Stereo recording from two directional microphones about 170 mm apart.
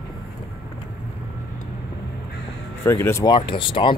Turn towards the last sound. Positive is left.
turn(degrees=30)  # may be behind; listen again after turning